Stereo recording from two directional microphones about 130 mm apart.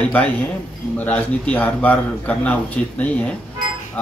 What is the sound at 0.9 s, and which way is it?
Speech, 10° left (ahead or behind).